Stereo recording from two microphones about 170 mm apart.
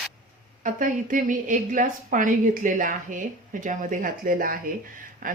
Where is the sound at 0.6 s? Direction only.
50° right (ahead or behind).